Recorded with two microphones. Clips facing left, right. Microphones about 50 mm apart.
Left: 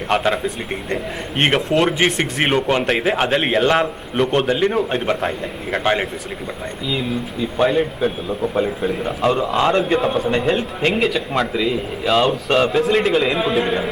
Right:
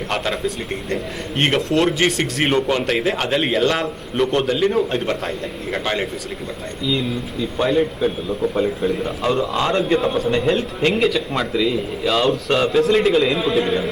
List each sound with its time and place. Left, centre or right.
0.1 s speech: centre
3.7 s a man's voice: left
4.2 s a man's voice: centre
11.5 s speech: centre
12.0 s a man's voice: centre